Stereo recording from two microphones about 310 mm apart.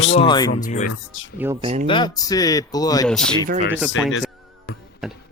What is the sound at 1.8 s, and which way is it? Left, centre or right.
Speech, centre.